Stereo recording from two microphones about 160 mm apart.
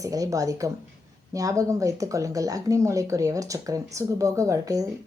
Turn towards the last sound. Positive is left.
turn(degrees=-20)  # may be behind; listen again after turning